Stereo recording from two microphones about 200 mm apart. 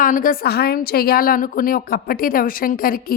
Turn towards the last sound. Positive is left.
turn(degrees=45)  # may be behind; listen again after turning